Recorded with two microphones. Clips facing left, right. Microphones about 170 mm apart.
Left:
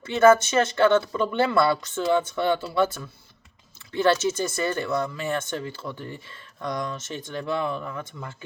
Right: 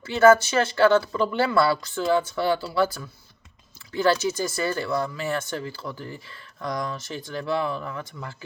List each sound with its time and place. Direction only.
0.0 s speech: 25° left (ahead or behind)
7.2 s speech: 20° left (ahead or behind)